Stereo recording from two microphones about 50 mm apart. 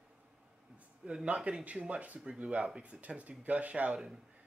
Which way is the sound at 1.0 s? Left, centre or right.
Centre.